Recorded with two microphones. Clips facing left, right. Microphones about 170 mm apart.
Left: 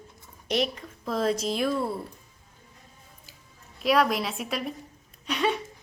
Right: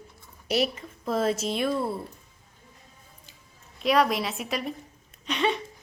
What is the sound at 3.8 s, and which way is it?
A woman's voice, centre (ahead or behind).